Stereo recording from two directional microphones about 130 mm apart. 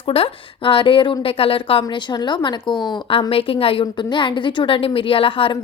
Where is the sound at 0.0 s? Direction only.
45° left (ahead or behind).